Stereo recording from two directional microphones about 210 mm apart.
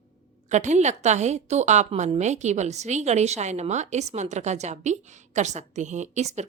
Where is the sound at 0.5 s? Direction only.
35° right (ahead or behind).